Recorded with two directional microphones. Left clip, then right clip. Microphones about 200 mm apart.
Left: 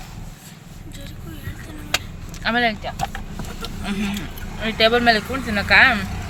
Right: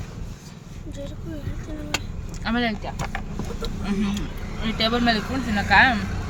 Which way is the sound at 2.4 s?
Centre (ahead or behind).